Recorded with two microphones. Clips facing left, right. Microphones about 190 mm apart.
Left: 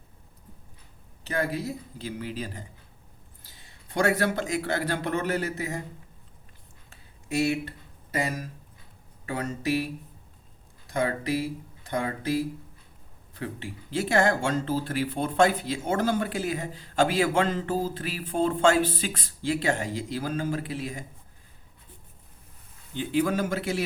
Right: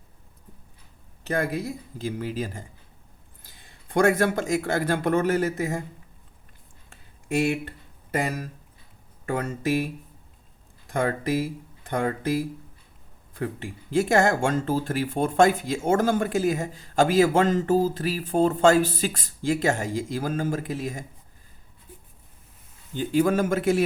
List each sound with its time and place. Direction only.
1.3 s speech: 50° right (ahead or behind)
3.8 s speech: 50° right (ahead or behind)
6.9 s a sound: 50° right (ahead or behind)
9.2 s speech: 50° right (ahead or behind)
23.0 s speech: 45° right (ahead or behind)